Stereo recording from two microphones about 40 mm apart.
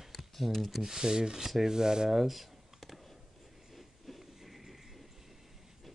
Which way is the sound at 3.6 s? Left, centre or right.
Centre.